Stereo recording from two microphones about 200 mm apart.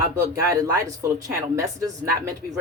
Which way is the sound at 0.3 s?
15° right (ahead or behind).